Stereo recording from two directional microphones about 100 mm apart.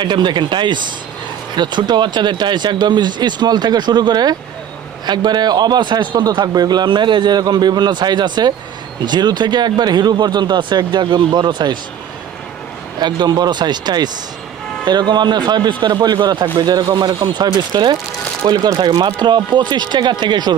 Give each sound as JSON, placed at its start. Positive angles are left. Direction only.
{"t": 0.0, "sound": "a man's voice", "side_deg": -50}
{"t": 13.0, "sound": "a man's voice", "side_deg": -45}